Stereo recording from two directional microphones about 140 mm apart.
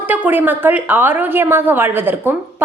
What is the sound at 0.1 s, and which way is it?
A woman's voice, 15° right (ahead or behind).